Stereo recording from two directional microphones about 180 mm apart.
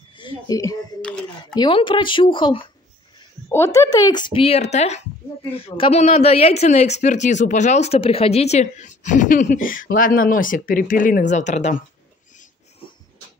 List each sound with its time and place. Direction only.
0.1 s a sound: 25° left (ahead or behind)
1.5 s speech: 25° left (ahead or behind)
3.2 s a woman's voice: 15° left (ahead or behind); by 11.8 s 40° left (ahead or behind)